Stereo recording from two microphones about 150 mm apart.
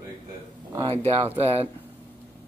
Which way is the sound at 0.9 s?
45° right (ahead or behind).